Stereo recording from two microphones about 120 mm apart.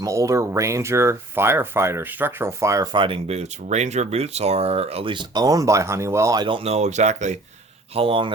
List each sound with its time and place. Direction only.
0.0 s speech: 25° right (ahead or behind)
2.9 s speech: 45° right (ahead or behind)
3.2 s speech: 65° right (ahead or behind); by 6.5 s 30° right (ahead or behind)
6.5 s speech: 55° right (ahead or behind); by 7.3 s 75° right (ahead or behind)
7.9 s speech: 50° right (ahead or behind)